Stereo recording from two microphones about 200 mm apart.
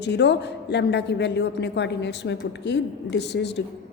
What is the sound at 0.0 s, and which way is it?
A woman's voice, 60° left (ahead or behind).